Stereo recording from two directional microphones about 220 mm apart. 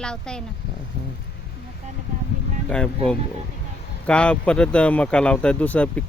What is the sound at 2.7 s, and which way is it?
Speech, 5° left (ahead or behind).